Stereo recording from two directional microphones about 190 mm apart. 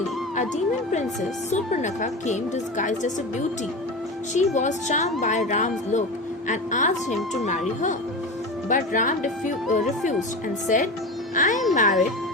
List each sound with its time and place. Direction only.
1.5 s speech: 40° left (ahead or behind)
4.4 s speech: 40° left (ahead or behind)
8.7 s speech: 45° left (ahead or behind)
11.3 s speech: 45° left (ahead or behind)